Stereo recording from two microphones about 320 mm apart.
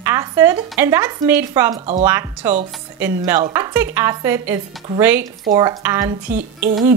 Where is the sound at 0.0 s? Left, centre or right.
Centre.